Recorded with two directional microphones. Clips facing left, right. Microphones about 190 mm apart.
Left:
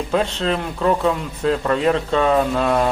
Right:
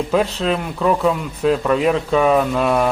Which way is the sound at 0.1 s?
10° right (ahead or behind).